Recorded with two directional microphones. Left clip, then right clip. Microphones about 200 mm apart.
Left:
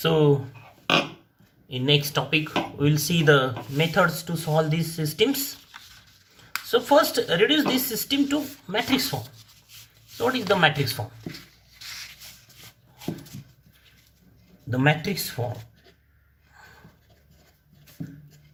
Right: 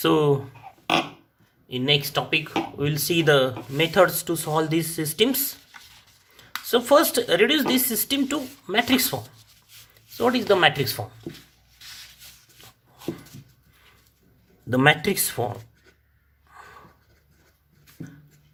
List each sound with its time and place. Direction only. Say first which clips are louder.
0.0 s speech: right 1 dB; 45° right (ahead or behind)
1.6 s speech: right 1 dB; 40° right (ahead or behind)
6.7 s speech: right 1 dB; 45° right (ahead or behind)
10.3 s speech: right 2 dB; 45° right (ahead or behind)
14.7 s speech: right 5 dB; 55° right (ahead or behind)